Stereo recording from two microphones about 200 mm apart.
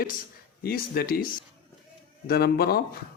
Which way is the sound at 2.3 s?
50° left (ahead or behind).